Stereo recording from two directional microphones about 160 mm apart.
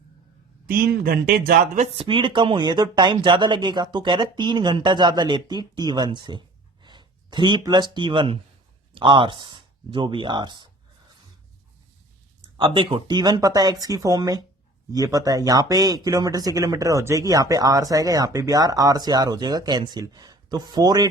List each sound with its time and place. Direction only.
1.0 s speech: 70° right (ahead or behind)
2.0 s speech: 30° right (ahead or behind)
12.5 s speech: 30° right (ahead or behind)